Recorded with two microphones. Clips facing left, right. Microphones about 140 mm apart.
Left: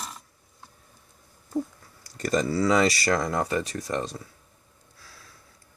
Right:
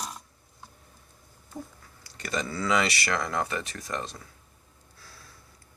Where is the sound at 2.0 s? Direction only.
40° left (ahead or behind).